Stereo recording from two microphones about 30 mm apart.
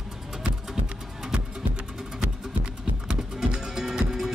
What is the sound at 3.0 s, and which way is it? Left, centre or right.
Music, right.